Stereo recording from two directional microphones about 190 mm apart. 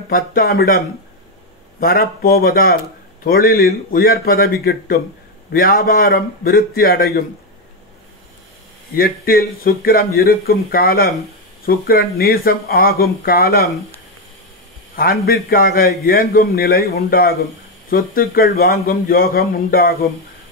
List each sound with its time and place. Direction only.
0.1 s a man's voice: 50° left (ahead or behind)
8.9 s a man's voice: 50° left (ahead or behind)
15.0 s a man's voice: 55° left (ahead or behind)